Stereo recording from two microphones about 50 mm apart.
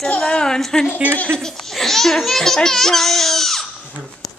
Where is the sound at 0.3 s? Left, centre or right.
Centre.